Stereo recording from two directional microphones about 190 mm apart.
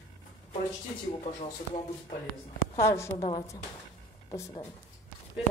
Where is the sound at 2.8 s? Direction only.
15° left (ahead or behind).